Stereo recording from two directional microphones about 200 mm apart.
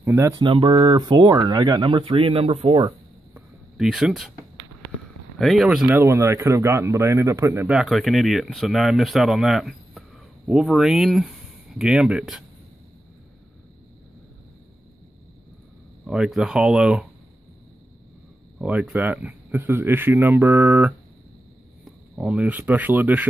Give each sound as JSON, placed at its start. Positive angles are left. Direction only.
{"t": 0.0, "sound": "speech", "side_deg": -15}
{"t": 0.4, "sound": "speech", "side_deg": -25}
{"t": 3.3, "sound": "a sound", "side_deg": 0}
{"t": 5.4, "sound": "speech", "side_deg": 0}
{"t": 5.9, "sound": "speech", "side_deg": -10}
{"t": 7.7, "sound": "speech", "side_deg": 0}
{"t": 16.1, "sound": "speech", "side_deg": -5}
{"t": 18.6, "sound": "speech", "side_deg": -5}